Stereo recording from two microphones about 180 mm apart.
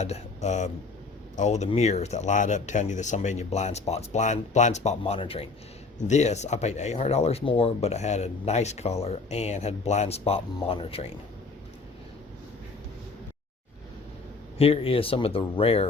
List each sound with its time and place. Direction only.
0.0 s speech: 40° left (ahead or behind)
14.6 s speech: 30° left (ahead or behind)